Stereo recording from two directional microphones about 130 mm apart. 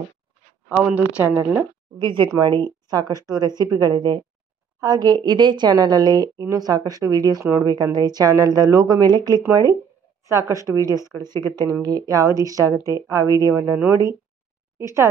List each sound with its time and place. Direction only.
0.7 s speech: 15° right (ahead or behind)
2.0 s a woman's voice: 35° right (ahead or behind)